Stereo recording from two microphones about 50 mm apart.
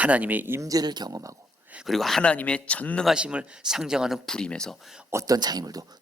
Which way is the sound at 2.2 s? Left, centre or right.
Left.